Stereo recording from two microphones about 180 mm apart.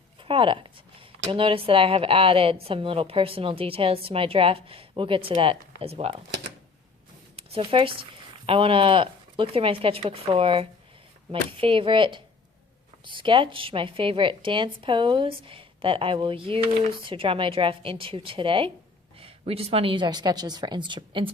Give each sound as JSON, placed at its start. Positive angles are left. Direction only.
{"t": 0.2, "sound": "speech", "side_deg": -30}
{"t": 7.3, "sound": "a woman's voice", "side_deg": -30}